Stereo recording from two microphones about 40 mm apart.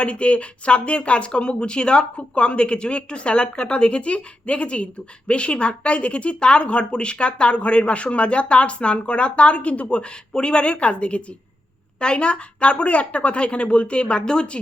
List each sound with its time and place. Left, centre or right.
0.0 s speech: left